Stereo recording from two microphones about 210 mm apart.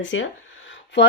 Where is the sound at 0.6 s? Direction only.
55° left (ahead or behind).